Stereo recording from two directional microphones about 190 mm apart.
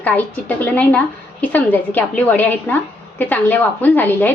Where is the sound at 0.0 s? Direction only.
10° left (ahead or behind).